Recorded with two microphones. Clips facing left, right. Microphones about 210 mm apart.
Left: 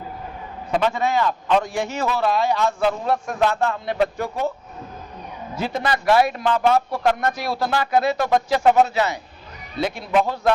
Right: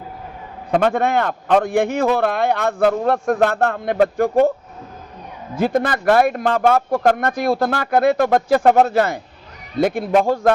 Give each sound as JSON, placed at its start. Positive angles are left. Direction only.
{"t": 0.7, "sound": "a man's voice", "side_deg": -55}
{"t": 5.5, "sound": "speech", "side_deg": -50}